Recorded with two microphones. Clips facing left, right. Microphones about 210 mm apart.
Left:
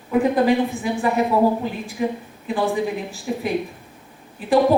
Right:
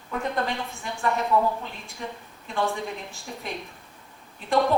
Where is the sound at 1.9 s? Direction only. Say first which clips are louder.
Left 11 dB; 15° left (ahead or behind).